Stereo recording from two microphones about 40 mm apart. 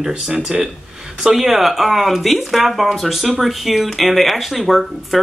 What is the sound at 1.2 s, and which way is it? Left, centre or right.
Speech, centre.